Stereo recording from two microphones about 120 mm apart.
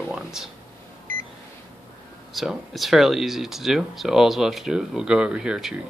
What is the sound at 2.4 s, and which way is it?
Speech, centre (ahead or behind).